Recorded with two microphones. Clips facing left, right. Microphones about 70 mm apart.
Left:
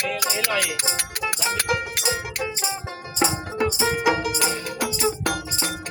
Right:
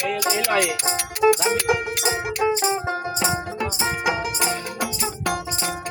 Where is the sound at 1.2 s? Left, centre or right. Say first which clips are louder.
Right 13 dB; right.